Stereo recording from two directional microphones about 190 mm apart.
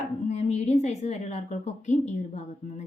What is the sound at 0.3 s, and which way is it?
Speech, 35° left (ahead or behind).